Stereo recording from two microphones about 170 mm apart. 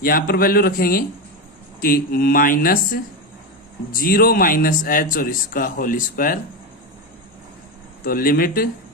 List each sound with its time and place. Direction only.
0.0 s speech: 60° left (ahead or behind)
8.0 s speech: 60° left (ahead or behind)